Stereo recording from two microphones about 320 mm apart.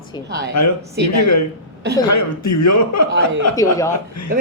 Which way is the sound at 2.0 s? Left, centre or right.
Left.